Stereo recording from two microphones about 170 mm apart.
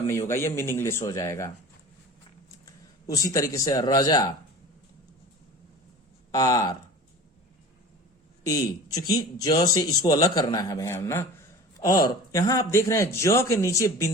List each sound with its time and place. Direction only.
0.1 s a man's voice: 15° left (ahead or behind)
2.6 s a man's voice: 20° left (ahead or behind)
6.3 s speech: 20° left (ahead or behind)
8.4 s a man's voice: 20° left (ahead or behind)